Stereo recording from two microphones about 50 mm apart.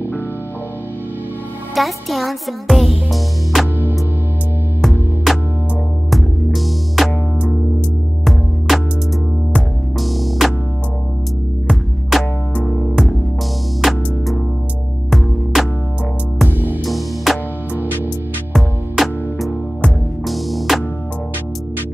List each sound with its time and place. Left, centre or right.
1.8 s music: centre
5.3 s music: centre
8.3 s music: centre
9.9 s music: centre
12.1 s music: centre
12.5 s music: left
12.9 s music: centre
15.5 s music: centre
16.4 s music: right
16.8 s music: centre
18.5 s music: centre